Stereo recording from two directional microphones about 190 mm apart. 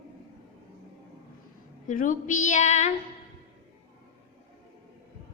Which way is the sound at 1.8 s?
45° left (ahead or behind).